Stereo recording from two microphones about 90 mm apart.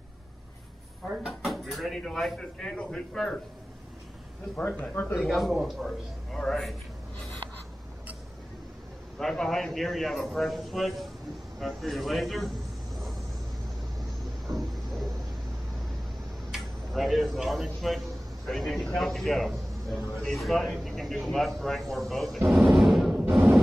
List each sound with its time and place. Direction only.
1.1 s speech: 5° right (ahead or behind)
4.6 s speech: 15° left (ahead or behind)
5.2 s speech: centre (ahead or behind)
9.2 s speech: 5° left (ahead or behind)
14.5 s a sound: centre (ahead or behind)
16.5 s speech: centre (ahead or behind)
22.7 s a sound: centre (ahead or behind)